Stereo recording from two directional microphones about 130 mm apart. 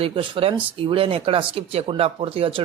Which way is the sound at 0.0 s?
45° right (ahead or behind).